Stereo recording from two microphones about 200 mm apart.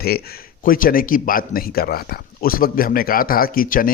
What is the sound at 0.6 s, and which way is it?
A man's voice, 45° left (ahead or behind).